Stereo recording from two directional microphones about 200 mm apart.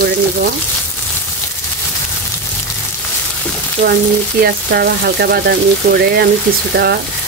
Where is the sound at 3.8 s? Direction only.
50° right (ahead or behind).